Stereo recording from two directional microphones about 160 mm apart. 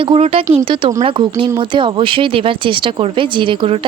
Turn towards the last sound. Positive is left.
turn(degrees=-35)  # may be behind; listen again after turning